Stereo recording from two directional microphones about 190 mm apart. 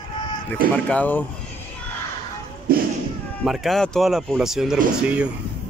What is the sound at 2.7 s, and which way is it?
Thump, 50° right (ahead or behind).